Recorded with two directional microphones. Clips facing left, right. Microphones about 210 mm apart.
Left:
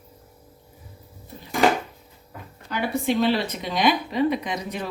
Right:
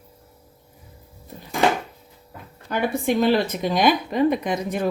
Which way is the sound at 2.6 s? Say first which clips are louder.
Right 2 dB; 50° right (ahead or behind).